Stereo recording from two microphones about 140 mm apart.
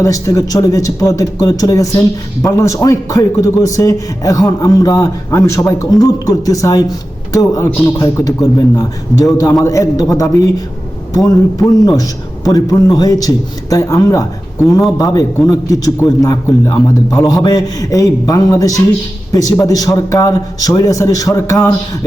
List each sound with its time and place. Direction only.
0.0 s a man's voice: 25° left (ahead or behind)
11.6 s a man's voice: centre (ahead or behind)
12.5 s a man's voice: 25° left (ahead or behind)